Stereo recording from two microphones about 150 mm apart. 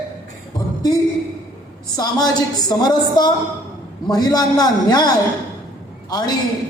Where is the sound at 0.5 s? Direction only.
25° left (ahead or behind).